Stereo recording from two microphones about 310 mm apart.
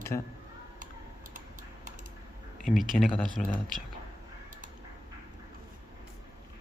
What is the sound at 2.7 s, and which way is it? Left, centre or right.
Speech, centre.